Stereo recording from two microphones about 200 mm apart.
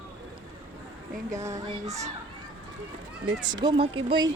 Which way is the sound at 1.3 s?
15° right (ahead or behind).